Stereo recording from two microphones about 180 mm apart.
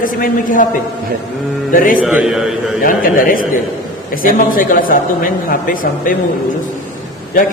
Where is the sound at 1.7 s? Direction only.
50° left (ahead or behind).